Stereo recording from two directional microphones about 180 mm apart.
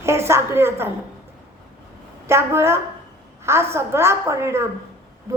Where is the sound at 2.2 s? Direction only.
15° right (ahead or behind).